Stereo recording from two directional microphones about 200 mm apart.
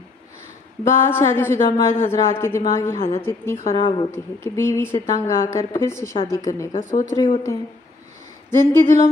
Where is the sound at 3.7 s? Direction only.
25° left (ahead or behind).